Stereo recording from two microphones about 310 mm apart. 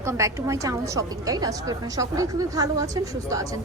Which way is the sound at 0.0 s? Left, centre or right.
Centre.